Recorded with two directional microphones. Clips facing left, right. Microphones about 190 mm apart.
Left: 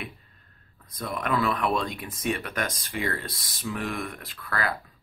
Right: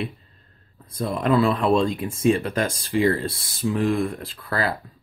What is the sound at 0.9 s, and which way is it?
Speech, 25° right (ahead or behind).